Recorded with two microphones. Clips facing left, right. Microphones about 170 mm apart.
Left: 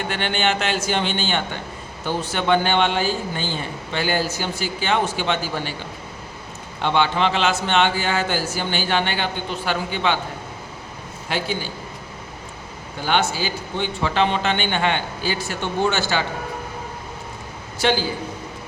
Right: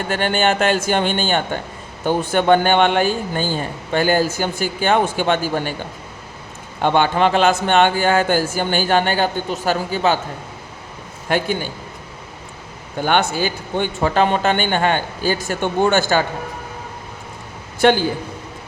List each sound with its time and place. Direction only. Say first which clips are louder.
0.1 s a man's voice: right 6 dB; 45° right (ahead or behind)
6.8 s a man's voice: right 4 dB; 50° right (ahead or behind)
11.3 s a man's voice: right 5 dB; 50° right (ahead or behind)
13.0 s a man's voice: right 4 dB; 55° right (ahead or behind)
17.7 s a man's voice: right 6 dB; 55° right (ahead or behind)